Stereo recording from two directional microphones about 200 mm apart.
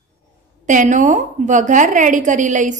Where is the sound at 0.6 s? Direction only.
40° right (ahead or behind).